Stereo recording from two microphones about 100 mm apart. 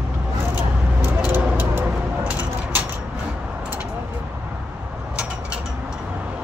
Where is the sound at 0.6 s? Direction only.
20° right (ahead or behind).